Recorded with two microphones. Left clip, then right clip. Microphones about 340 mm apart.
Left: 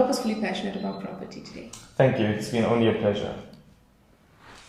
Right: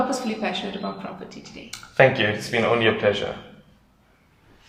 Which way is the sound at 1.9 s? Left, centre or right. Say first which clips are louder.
Right 5 dB; right.